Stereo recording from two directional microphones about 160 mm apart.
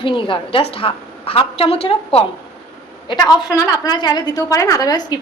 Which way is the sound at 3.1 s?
25° left (ahead or behind).